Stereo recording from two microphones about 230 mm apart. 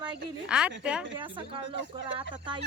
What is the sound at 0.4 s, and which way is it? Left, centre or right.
Speech, centre.